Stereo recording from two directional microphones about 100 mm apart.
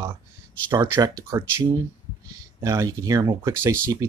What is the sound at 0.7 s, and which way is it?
Speech, 40° right (ahead or behind).